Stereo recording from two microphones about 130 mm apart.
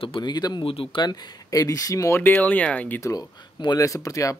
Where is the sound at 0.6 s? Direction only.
45° left (ahead or behind).